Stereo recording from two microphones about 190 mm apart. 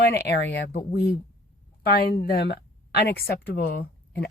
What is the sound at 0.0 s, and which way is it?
Speech, 60° left (ahead or behind).